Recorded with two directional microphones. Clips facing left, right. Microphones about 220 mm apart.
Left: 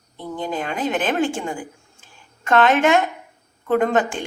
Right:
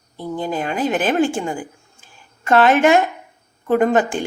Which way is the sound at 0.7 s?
5° right (ahead or behind).